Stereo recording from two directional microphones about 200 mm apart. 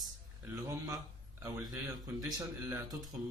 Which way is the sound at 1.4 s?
15° right (ahead or behind).